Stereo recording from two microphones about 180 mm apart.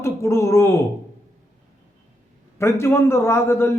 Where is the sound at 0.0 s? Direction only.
15° left (ahead or behind).